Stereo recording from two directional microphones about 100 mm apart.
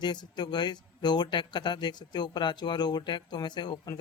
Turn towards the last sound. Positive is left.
turn(degrees=45)  # may be behind; listen again after turning